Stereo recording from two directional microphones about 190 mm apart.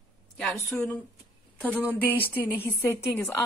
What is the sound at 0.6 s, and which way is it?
Speech, centre (ahead or behind).